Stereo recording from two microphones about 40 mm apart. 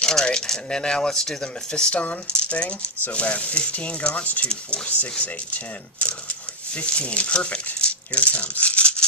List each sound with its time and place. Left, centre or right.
0.1 s speech: centre; by 8.9 s left